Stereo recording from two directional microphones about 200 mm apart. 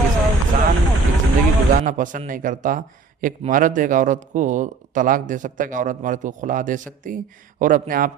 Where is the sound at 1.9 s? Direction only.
40° right (ahead or behind).